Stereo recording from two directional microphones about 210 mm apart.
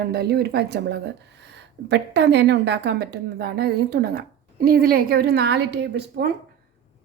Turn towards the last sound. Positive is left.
turn(degrees=-50)  # may be behind; listen again after turning